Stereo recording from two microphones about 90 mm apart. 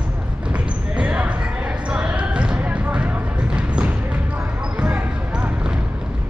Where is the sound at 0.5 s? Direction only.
15° right (ahead or behind).